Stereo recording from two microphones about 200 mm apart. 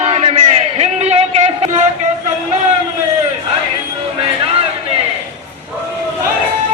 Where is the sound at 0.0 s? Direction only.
30° right (ahead or behind).